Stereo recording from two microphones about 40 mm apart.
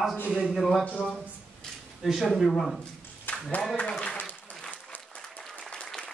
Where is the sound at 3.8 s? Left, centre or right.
Left.